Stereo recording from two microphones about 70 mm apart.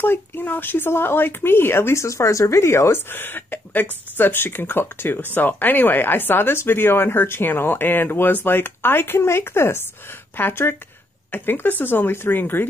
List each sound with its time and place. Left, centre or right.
0.0 s a woman's voice: left